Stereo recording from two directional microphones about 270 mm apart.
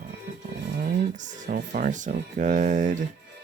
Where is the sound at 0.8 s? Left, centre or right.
Right.